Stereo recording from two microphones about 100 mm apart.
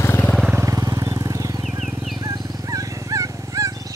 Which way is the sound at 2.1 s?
40° right (ahead or behind).